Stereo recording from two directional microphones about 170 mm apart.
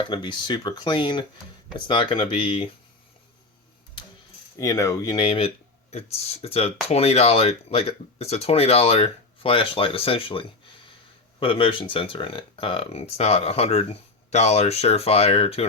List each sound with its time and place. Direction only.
0.0 s speech: 30° left (ahead or behind)
4.5 s speech: 20° left (ahead or behind); by 15.6 s 35° left (ahead or behind)